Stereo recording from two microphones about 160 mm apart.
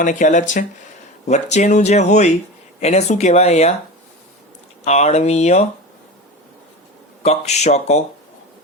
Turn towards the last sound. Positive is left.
turn(degrees=45)  # may be behind; listen again after turning